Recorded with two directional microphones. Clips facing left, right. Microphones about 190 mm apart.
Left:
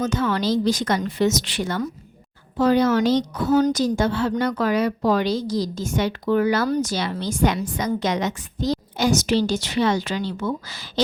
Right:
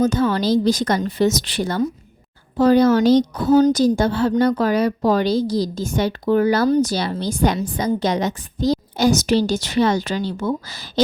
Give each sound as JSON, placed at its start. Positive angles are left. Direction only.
{"t": 0.0, "sound": "a woman's voice", "side_deg": -35}